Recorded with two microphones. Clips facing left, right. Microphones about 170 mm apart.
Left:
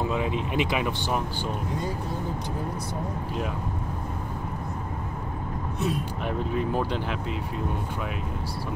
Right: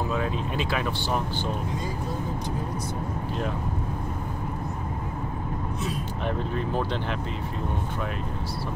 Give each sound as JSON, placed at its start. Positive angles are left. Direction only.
{"t": 0.1, "sound": "speech", "side_deg": 15}
{"t": 6.2, "sound": "speech", "side_deg": 10}